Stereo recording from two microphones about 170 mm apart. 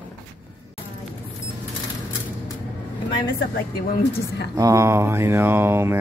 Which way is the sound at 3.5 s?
60° left (ahead or behind).